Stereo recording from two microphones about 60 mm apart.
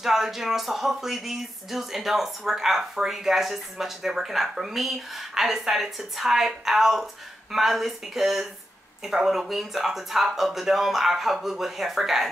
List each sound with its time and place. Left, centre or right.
0.0 s speech: centre